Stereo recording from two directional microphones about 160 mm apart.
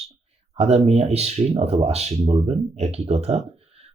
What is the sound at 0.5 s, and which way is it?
Speech, 40° right (ahead or behind).